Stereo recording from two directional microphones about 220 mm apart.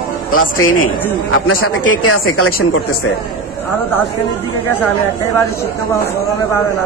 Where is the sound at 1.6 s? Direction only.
75° left (ahead or behind).